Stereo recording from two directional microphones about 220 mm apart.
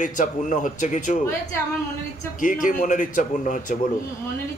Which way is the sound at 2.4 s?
35° left (ahead or behind).